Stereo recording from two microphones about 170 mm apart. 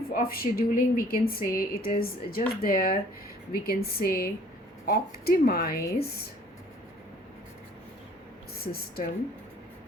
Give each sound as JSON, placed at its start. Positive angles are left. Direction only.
{"t": 0.1, "sound": "speech", "side_deg": 60}
{"t": 8.6, "sound": "speech", "side_deg": 65}